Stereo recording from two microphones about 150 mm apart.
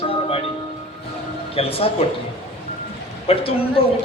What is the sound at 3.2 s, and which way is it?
Speech, 40° left (ahead or behind).